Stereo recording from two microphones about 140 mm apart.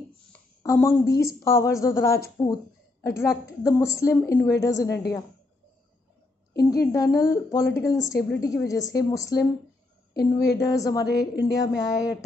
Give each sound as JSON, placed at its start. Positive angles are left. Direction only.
{"t": 0.6, "sound": "speech", "side_deg": 20}
{"t": 6.6, "sound": "speech", "side_deg": 25}